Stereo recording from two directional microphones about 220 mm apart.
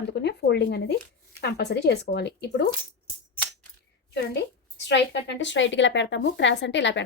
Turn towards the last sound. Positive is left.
turn(degrees=55)  # may be behind; listen again after turning